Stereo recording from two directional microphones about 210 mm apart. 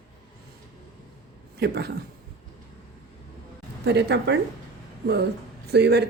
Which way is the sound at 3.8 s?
55° right (ahead or behind).